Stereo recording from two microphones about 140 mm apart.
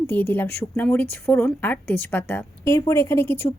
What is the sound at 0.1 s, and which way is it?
A woman's voice, 15° left (ahead or behind).